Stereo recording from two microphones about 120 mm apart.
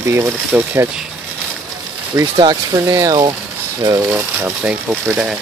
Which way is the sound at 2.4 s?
35° right (ahead or behind).